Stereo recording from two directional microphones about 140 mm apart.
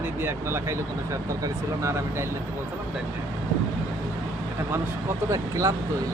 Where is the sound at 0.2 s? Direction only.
15° right (ahead or behind).